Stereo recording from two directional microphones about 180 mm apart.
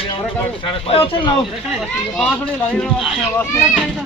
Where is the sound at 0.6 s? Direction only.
30° left (ahead or behind).